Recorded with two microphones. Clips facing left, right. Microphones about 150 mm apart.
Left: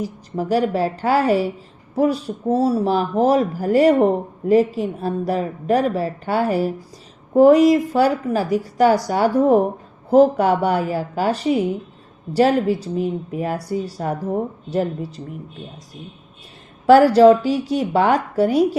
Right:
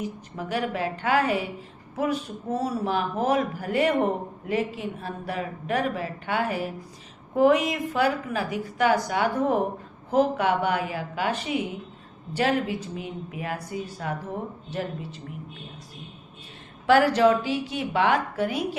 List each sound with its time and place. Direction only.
0.0 s speech: 35° left (ahead or behind)
16.8 s speech: 40° left (ahead or behind)